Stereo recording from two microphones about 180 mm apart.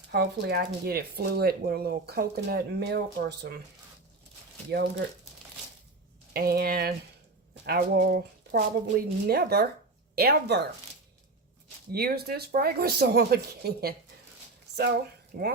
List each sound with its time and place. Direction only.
0.1 s speech: 65° right (ahead or behind)
4.7 s speech: 65° right (ahead or behind)
6.3 s speech: 55° right (ahead or behind)
11.9 s speech: 60° right (ahead or behind)